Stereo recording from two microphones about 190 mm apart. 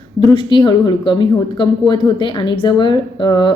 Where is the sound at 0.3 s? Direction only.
25° left (ahead or behind).